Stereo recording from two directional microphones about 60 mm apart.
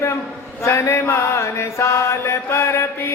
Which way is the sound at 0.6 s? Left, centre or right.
Left.